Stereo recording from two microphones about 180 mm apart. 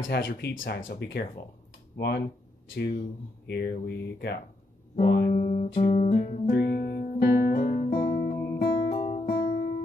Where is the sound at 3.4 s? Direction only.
65° left (ahead or behind).